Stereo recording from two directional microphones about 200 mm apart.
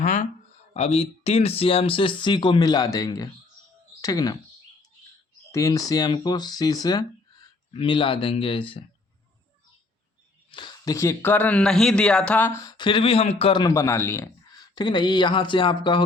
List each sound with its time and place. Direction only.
0.0 s speech: 40° left (ahead or behind); by 4.4 s 20° left (ahead or behind)
5.5 s speech: 15° left (ahead or behind)
10.5 s speech: 20° left (ahead or behind)